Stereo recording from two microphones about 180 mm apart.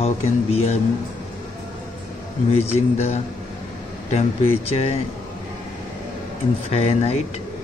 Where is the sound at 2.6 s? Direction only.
35° left (ahead or behind).